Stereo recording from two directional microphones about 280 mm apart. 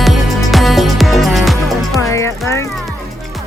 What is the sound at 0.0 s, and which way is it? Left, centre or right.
Music, centre.